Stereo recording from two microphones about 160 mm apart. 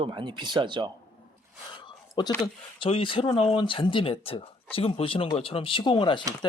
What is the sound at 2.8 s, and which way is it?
Speech, 35° left (ahead or behind).